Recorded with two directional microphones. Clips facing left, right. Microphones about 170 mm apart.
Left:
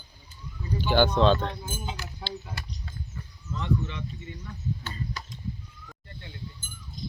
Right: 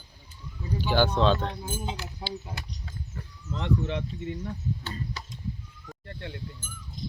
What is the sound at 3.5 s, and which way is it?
Speech, 70° right (ahead or behind).